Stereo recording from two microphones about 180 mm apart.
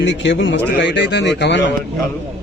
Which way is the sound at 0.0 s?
80° left.